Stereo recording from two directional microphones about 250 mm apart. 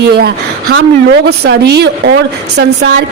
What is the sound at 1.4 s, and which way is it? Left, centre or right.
Speech, right.